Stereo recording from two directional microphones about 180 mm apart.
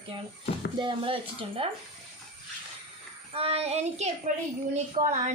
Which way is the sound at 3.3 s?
35° right (ahead or behind).